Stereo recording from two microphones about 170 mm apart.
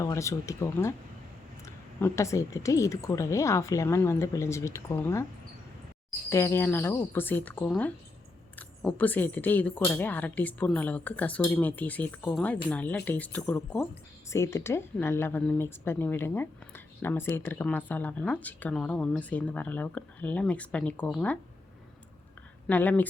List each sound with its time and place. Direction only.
0.0 s speech: 20° left (ahead or behind)
6.3 s speech: 15° left (ahead or behind)
22.6 s speech: 10° left (ahead or behind)